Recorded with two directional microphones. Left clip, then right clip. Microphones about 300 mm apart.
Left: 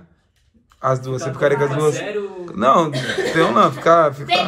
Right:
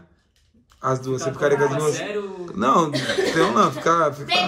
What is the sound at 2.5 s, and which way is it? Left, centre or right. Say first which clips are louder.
Speech: left 4 dB; centre.